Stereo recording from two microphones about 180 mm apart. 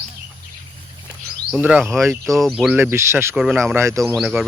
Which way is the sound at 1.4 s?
10° right (ahead or behind).